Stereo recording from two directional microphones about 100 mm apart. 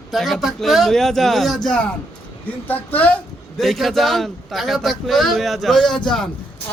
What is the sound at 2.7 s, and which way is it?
Speech, 20° left (ahead or behind).